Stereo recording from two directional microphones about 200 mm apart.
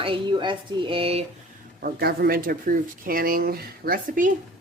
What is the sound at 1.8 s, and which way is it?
A woman's voice, 50° right (ahead or behind).